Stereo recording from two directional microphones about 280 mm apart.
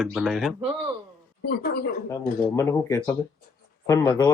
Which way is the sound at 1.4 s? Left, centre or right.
Left.